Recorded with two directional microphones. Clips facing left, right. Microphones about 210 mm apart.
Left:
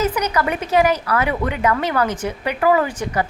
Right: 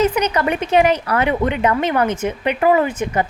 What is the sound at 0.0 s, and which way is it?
A woman's voice, 30° right (ahead or behind).